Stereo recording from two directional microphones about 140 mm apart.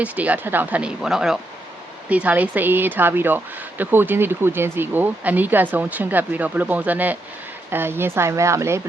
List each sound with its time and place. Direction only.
0.0 s speech: 10° right (ahead or behind)